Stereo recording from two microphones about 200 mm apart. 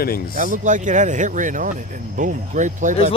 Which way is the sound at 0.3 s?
40° right (ahead or behind).